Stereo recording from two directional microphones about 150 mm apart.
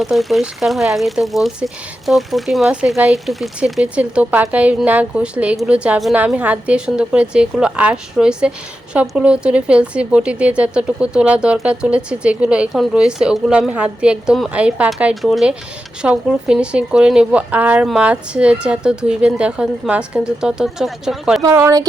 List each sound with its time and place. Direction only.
0.0 s speech: centre (ahead or behind)
21.4 s speech: 20° right (ahead or behind)